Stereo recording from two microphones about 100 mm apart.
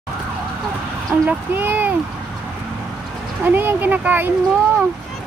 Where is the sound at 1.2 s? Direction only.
15° right (ahead or behind).